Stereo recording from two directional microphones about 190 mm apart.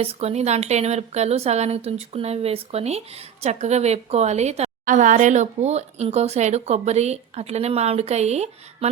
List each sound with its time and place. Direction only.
0.0 s speech: 30° right (ahead or behind)